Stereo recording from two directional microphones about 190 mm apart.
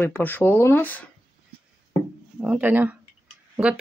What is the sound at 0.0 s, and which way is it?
Speech, 10° left (ahead or behind).